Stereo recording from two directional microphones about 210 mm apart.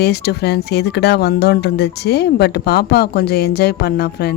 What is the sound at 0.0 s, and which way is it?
Speech, 50° left (ahead or behind).